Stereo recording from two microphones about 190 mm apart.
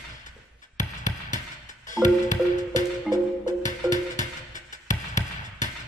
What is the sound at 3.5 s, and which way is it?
Music, 40° left (ahead or behind).